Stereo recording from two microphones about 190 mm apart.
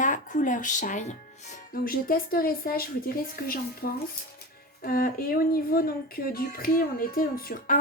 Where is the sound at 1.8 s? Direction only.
50° left (ahead or behind).